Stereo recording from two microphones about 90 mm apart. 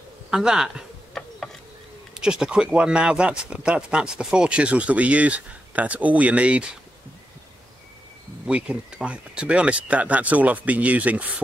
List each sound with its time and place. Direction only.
0.3 s speech: 5° right (ahead or behind)
1.1 s gears: 5° left (ahead or behind)
2.1 s speech: 10° right (ahead or behind)
8.5 s speech: 10° right (ahead or behind)